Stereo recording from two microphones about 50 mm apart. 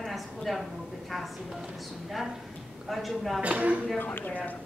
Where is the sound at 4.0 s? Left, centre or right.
Left.